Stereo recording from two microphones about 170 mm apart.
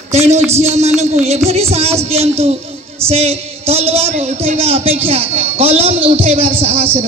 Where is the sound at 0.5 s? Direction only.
40° right (ahead or behind).